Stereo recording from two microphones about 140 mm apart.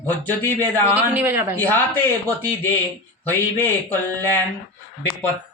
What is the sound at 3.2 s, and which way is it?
Speech, 15° left (ahead or behind).